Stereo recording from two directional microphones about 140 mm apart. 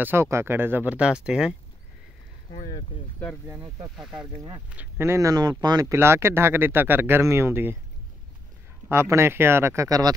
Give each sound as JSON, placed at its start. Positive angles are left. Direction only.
{"t": 0.0, "sound": "speech", "side_deg": -15}
{"t": 3.4, "sound": "speech", "side_deg": -15}
{"t": 9.1, "sound": "speech", "side_deg": -15}